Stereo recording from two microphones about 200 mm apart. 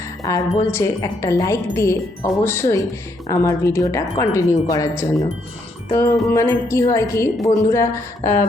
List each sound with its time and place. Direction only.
0.2 s a woman's voice: 15° left (ahead or behind)